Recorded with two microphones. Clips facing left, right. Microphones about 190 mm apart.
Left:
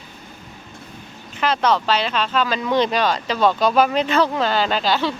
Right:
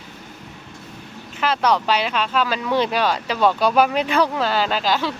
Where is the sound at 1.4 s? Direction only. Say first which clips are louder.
Left 1 dB; 5° right (ahead or behind).